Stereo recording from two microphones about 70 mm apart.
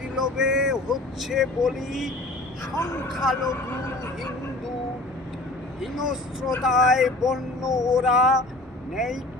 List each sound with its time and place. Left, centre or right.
0.2 s speech: centre
2.7 s speech: left
3.1 s speech: centre
5.8 s speech: centre